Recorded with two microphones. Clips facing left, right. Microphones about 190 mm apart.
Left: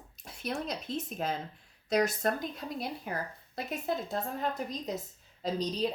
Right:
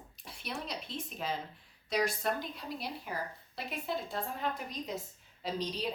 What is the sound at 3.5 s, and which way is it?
A woman's voice, 45° left (ahead or behind).